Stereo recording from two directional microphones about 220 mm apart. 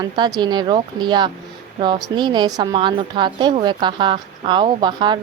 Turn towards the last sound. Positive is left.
turn(degrees=-20)  # may be behind; listen again after turning